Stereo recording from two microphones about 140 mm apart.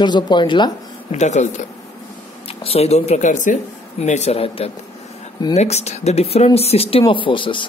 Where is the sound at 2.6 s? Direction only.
45° left (ahead or behind).